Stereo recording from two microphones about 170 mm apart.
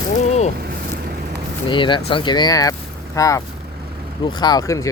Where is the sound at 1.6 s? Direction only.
30° left (ahead or behind).